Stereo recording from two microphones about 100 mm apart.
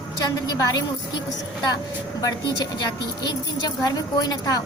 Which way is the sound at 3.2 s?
40° left (ahead or behind).